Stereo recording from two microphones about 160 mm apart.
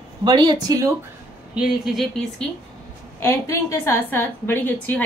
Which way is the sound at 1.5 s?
5° right (ahead or behind).